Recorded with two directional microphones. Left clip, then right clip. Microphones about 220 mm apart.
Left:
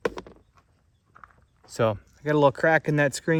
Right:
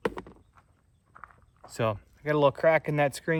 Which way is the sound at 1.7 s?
50° left (ahead or behind).